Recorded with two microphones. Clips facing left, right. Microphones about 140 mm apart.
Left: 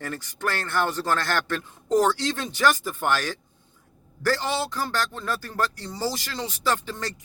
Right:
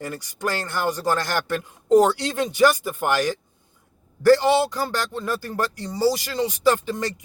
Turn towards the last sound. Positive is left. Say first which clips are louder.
# right 6 dB
turn(degrees=-15)  # may be behind; listen again after turning